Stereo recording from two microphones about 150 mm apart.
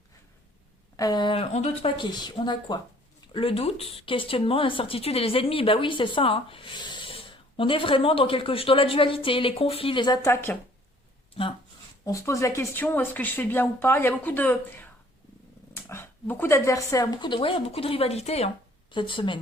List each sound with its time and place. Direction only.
0.9 s speech: 25° left (ahead or behind); by 1.9 s 45° left (ahead or behind)
2.0 s a woman's voice: 30° left (ahead or behind)
3.3 s speech: 40° left (ahead or behind)
10.3 s speech: 15° left (ahead or behind)
12.0 s speech: 20° left (ahead or behind)